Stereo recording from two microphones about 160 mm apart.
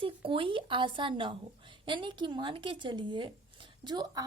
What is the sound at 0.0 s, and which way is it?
A woman's voice, 35° right (ahead or behind).